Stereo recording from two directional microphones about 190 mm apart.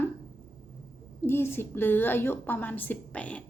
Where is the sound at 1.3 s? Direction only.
10° left (ahead or behind).